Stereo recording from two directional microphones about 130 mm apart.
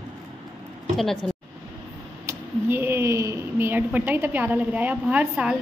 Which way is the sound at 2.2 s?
20° right (ahead or behind).